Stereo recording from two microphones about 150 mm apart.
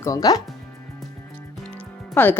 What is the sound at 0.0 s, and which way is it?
Speech, 25° left (ahead or behind).